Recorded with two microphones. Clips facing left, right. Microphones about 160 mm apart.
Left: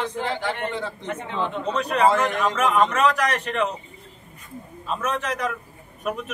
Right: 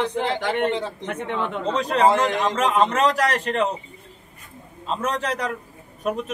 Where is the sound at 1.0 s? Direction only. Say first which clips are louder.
Right 3 dB; 65° right (ahead or behind).